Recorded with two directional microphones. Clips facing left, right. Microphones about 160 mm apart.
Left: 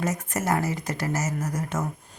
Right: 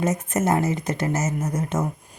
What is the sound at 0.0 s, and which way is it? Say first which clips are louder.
Speech: right 5 dB; 20° right (ahead or behind).